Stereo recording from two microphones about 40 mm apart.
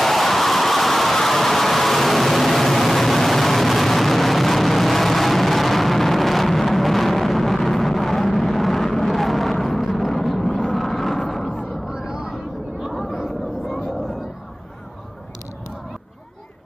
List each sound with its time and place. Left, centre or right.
0.0 s a sound: centre
11.9 s vehicle: centre
12.9 s chatter: centre